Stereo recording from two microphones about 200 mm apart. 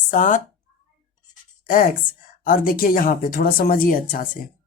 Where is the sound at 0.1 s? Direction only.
40° left (ahead or behind).